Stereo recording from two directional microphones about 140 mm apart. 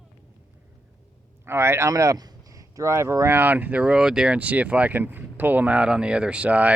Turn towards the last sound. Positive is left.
turn(degrees=-10)  # may be behind; listen again after turning